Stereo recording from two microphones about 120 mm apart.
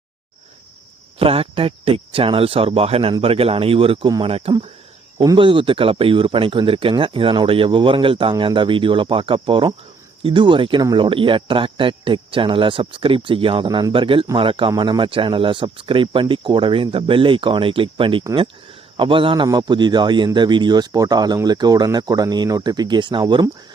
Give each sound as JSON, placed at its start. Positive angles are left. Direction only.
{"t": 1.2, "sound": "speech", "side_deg": -50}
{"t": 5.1, "sound": "speech", "side_deg": -30}
{"t": 5.4, "sound": "speech", "side_deg": -45}